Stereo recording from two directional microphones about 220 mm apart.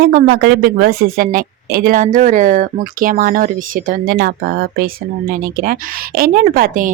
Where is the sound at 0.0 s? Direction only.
40° right (ahead or behind).